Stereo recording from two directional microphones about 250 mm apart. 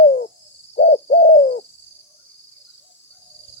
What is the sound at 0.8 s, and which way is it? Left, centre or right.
Owl, left.